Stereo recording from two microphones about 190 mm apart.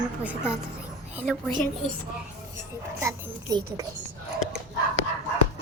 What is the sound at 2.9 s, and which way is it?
Speech, 15° right (ahead or behind).